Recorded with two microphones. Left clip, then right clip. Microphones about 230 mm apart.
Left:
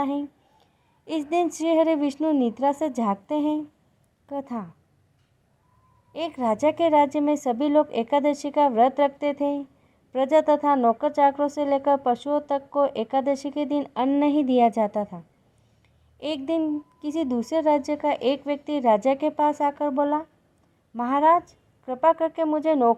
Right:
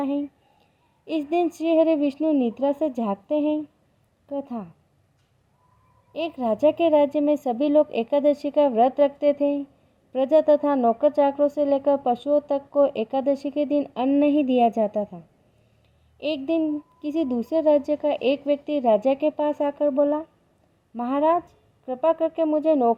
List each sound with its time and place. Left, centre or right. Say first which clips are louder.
0.0 s speech: even; left
1.3 s speech: even; left
6.1 s speech: even; left
16.2 s speech: right 2 dB; left